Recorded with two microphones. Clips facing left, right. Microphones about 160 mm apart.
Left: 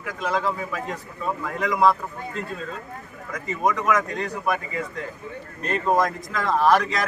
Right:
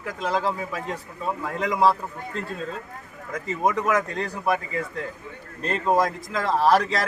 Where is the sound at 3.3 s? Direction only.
25° right (ahead or behind).